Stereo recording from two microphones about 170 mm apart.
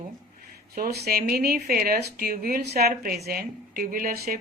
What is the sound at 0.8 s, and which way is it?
Speech, 70° right (ahead or behind).